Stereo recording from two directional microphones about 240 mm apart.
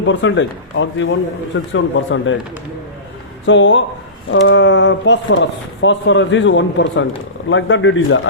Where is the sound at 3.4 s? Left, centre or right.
Left.